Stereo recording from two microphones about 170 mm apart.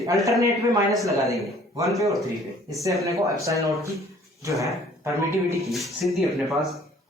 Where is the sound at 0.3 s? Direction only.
20° right (ahead or behind).